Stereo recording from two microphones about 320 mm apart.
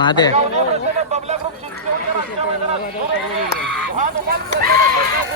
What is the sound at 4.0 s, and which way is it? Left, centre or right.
Speech, right.